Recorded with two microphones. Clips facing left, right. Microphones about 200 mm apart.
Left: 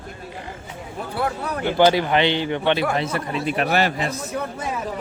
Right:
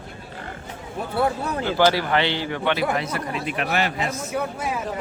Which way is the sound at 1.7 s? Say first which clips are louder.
Left 3 dB; 20° left (ahead or behind).